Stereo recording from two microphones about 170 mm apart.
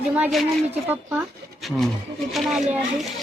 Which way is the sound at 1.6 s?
Centre (ahead or behind).